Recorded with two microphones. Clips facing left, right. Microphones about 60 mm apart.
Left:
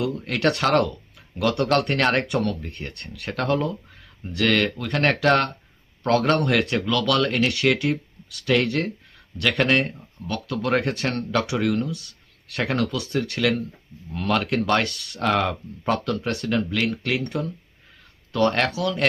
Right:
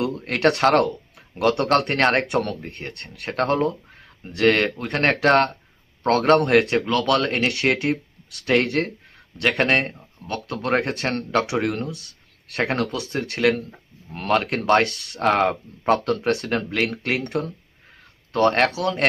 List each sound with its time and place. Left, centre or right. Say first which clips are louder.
0.0 s speech: right 2 dB; right
11.9 s speech: left 2 dB; left
12.5 s speech: right 1 dB; right